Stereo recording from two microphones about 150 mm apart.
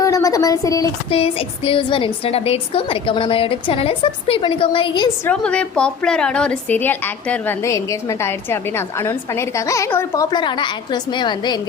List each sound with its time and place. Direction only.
0.0 s a sound: 20° left (ahead or behind)
1.1 s a woman's voice: 40° left (ahead or behind)
5.3 s a woman's voice: 5° left (ahead or behind)
10.2 s a woman's voice: 30° left (ahead or behind)